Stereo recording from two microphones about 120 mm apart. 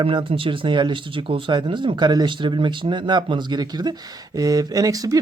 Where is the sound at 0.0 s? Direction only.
45° right (ahead or behind).